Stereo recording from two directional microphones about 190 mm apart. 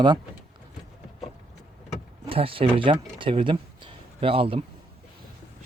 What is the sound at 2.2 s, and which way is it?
Speech, 30° right (ahead or behind).